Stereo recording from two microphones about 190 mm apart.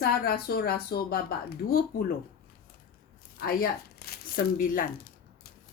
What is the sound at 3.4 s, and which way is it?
Speech, 55° left (ahead or behind).